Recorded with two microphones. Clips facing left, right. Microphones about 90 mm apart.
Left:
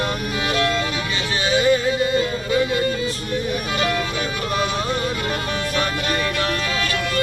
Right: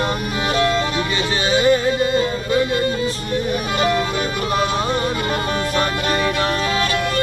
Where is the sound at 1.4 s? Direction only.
30° right (ahead or behind).